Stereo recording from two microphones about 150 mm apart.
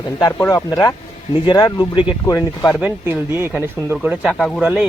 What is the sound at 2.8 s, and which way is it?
Speech, 15° right (ahead or behind).